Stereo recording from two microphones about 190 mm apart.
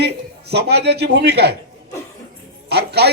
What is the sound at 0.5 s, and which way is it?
A man's voice, 60° right (ahead or behind).